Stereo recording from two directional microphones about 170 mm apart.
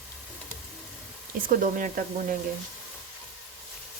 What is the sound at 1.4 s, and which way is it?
Speech, 55° right (ahead or behind).